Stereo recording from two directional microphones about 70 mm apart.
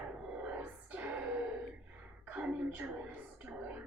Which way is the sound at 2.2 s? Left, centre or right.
Right.